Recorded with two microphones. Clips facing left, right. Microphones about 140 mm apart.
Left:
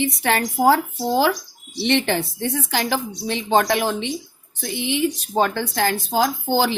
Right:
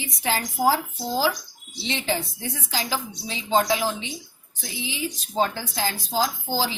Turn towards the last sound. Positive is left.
turn(degrees=65)  # may be behind; listen again after turning